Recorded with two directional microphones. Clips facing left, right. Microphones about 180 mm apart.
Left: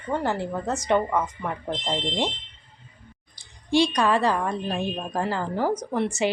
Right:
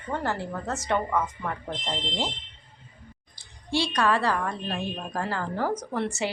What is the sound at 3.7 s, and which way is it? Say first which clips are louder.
A woman's voice: left 4 dB; 15° left (ahead or behind).